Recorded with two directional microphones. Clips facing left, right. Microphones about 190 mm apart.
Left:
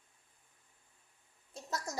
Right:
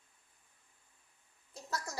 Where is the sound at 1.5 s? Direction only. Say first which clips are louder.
Left 1 dB; 20° left (ahead or behind).